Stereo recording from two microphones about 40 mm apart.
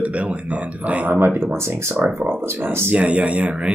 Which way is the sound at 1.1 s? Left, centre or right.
Right.